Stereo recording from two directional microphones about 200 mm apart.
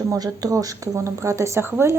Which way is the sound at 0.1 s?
20° right (ahead or behind).